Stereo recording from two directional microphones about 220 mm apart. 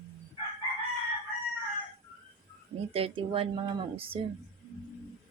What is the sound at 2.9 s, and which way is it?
Speech, 25° right (ahead or behind).